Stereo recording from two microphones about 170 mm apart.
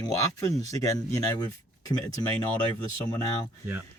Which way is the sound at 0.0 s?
20° left (ahead or behind).